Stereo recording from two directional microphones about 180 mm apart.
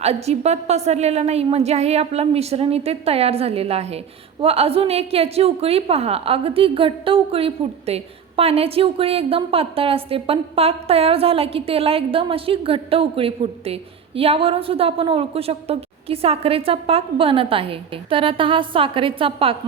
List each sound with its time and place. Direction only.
0.0 s a woman's voice: 35° right (ahead or behind)